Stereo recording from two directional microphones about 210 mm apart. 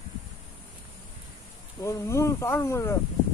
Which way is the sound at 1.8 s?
15° left (ahead or behind).